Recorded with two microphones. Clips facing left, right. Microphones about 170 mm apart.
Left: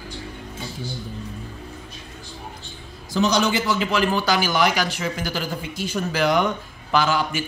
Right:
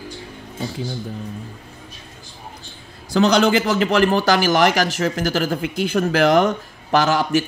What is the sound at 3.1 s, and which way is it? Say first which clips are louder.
A man's voice: right 5 dB; 60° right (ahead or behind).